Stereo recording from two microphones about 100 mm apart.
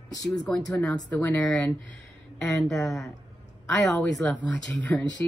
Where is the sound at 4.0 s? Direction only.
15° left (ahead or behind).